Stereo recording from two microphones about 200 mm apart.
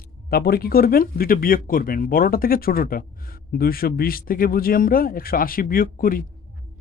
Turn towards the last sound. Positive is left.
turn(degrees=45)  # may be behind; listen again after turning